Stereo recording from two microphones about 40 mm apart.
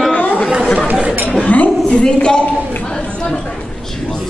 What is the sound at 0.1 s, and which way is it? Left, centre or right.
Chatter, left.